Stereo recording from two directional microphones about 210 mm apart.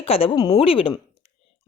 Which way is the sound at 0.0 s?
25° left (ahead or behind).